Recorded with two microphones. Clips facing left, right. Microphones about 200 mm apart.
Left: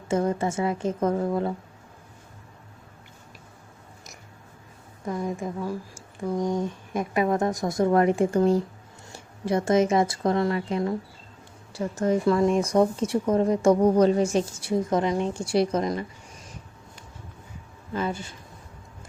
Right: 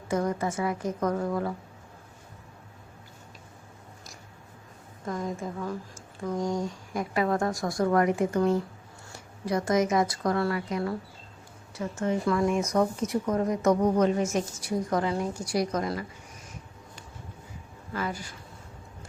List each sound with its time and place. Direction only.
0.1 s speech: 25° left (ahead or behind)
5.1 s a woman's voice: 15° left (ahead or behind)
11.7 s speech: 35° left (ahead or behind)
17.9 s speech: 25° left (ahead or behind)